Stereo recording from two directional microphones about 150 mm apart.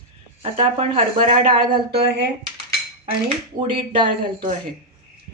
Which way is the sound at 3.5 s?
35° right (ahead or behind).